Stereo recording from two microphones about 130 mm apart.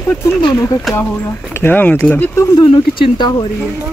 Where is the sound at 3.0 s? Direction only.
35° left (ahead or behind).